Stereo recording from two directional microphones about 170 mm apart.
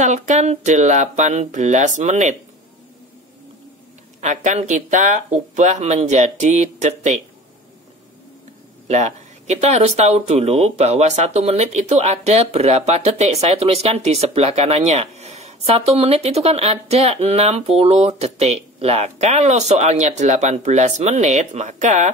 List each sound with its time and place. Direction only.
0.0 s speech: 45° right (ahead or behind)
4.2 s speech: 45° right (ahead or behind)
8.8 s speech: 40° right (ahead or behind)